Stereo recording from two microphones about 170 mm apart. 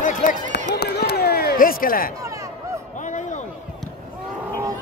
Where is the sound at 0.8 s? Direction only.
70° left (ahead or behind).